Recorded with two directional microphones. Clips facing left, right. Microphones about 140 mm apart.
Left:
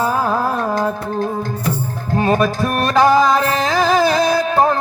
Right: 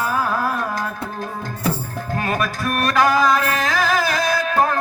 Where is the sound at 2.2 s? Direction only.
25° left (ahead or behind).